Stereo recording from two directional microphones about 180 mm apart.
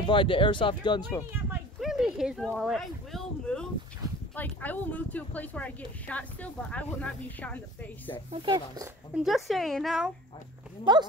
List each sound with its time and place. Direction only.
0.0 s speech: 25° left (ahead or behind)
1.3 s a sound: 5° right (ahead or behind)
4.4 s speech: 10° left (ahead or behind)
8.3 s speech: 25° right (ahead or behind)
9.1 s speech: centre (ahead or behind)
10.9 s speech: 25° right (ahead or behind)